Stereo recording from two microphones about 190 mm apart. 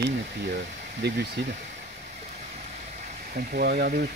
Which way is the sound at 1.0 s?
65° right (ahead or behind).